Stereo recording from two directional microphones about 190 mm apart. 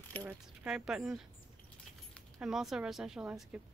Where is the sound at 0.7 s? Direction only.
5° right (ahead or behind).